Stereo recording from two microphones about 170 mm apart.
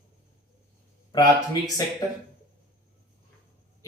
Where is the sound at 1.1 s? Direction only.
25° left (ahead or behind).